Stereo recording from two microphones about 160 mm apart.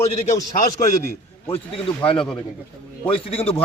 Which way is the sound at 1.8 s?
35° left (ahead or behind).